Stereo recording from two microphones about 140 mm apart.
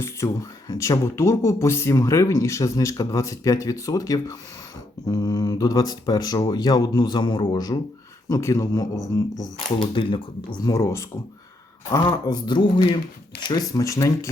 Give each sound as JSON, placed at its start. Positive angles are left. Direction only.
{"t": 0.0, "sound": "speech", "side_deg": 20}
{"t": 9.7, "sound": "speech", "side_deg": 35}
{"t": 10.6, "sound": "speech", "side_deg": 20}
{"t": 12.2, "sound": "speech", "side_deg": 30}